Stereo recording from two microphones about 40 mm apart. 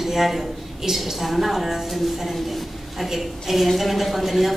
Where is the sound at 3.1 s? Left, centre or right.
Centre.